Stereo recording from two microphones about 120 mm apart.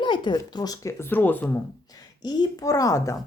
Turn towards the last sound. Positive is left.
turn(degrees=30)  # may be behind; listen again after turning